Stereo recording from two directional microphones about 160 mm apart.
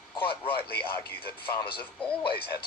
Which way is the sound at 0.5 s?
75° left (ahead or behind).